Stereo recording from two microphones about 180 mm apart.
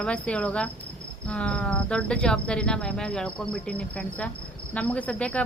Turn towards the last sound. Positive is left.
turn(degrees=5)  # may be behind; listen again after turning